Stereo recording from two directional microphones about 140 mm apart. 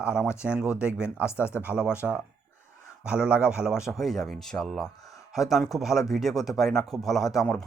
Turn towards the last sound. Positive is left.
turn(degrees=5)  # may be behind; listen again after turning